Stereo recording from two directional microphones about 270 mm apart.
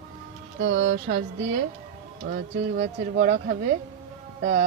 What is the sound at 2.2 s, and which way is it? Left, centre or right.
Speech, right.